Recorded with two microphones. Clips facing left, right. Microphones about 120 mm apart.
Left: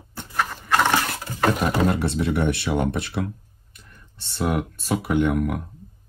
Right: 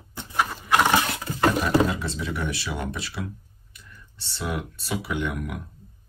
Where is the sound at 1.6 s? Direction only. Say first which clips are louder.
Left 1 dB; 60° left (ahead or behind).